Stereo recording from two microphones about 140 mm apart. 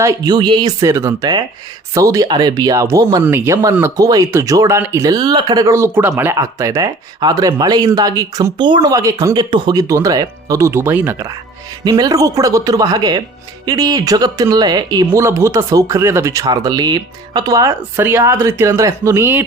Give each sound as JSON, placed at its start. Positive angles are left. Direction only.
{"t": 0.0, "sound": "speech", "side_deg": -25}